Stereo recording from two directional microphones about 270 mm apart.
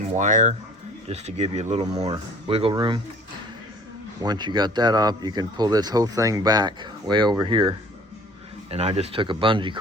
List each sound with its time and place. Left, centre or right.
0.2 s speech: right
4.2 s speech: centre